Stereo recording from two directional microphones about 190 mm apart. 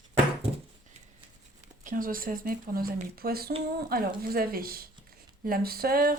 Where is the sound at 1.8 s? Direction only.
45° right (ahead or behind).